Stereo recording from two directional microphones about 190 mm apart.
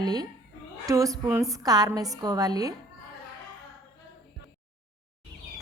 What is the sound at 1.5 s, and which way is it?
Speech, 20° right (ahead or behind).